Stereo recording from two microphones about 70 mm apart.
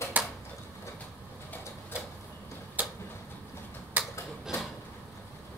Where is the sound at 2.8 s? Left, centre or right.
Right.